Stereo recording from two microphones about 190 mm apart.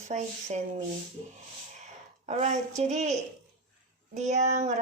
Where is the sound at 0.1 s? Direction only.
40° right (ahead or behind).